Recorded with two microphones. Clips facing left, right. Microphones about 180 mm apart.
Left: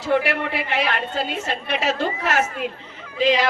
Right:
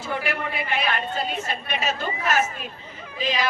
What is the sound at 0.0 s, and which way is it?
A woman's voice, 75° left (ahead or behind).